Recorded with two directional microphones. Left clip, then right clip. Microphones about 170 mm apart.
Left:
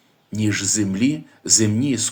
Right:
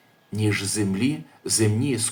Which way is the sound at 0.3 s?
25° left (ahead or behind).